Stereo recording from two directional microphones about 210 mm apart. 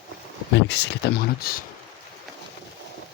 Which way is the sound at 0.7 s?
55° left (ahead or behind).